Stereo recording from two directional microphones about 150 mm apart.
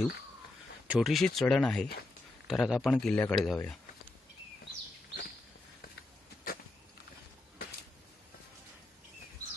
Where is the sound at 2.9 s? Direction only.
10° left (ahead or behind).